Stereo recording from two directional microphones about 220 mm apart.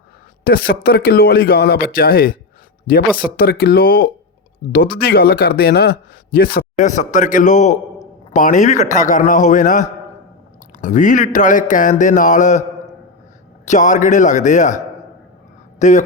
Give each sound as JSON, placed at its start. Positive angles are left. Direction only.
{"t": 0.4, "sound": "a man's voice", "side_deg": 45}
{"t": 13.7, "sound": "a man's voice", "side_deg": 35}
{"t": 15.8, "sound": "a man's voice", "side_deg": 35}